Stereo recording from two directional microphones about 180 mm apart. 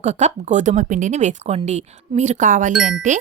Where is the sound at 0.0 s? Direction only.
40° right (ahead or behind).